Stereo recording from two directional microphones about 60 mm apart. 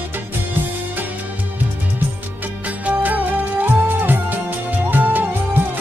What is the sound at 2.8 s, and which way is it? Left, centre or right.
Music, right.